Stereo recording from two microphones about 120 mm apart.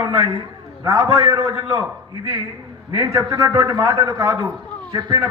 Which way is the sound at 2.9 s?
25° right (ahead or behind).